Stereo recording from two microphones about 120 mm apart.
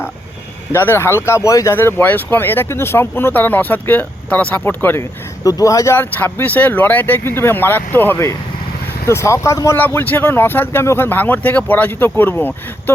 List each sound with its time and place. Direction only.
0.7 s speech: 20° left (ahead or behind)
5.4 s speech: 30° left (ahead or behind)